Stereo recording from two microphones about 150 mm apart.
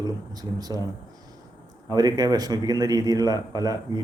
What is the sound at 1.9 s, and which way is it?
A man's voice, 25° right (ahead or behind).